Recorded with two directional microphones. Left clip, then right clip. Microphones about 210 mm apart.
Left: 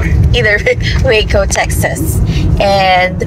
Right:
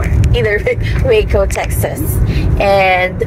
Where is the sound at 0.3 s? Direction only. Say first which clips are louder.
Left 4 dB; centre (ahead or behind).